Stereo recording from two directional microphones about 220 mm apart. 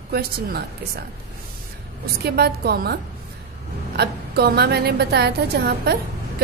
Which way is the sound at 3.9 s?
45° right (ahead or behind).